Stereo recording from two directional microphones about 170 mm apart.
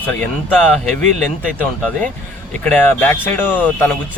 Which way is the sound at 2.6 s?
10° left (ahead or behind).